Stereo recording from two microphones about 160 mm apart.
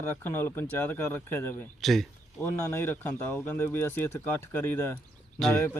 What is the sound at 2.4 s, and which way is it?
Speech, 15° left (ahead or behind).